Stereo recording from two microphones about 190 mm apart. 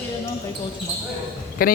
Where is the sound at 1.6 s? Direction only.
50° left (ahead or behind).